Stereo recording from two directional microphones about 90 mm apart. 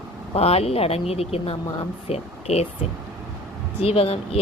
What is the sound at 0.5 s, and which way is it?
Speech, 90° left.